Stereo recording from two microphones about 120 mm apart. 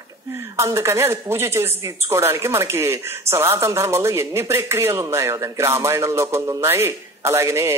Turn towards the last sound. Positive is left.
turn(degrees=-20)  # may be behind; listen again after turning